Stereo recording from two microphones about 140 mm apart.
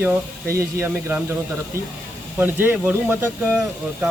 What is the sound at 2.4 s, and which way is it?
Speech, 15° right (ahead or behind).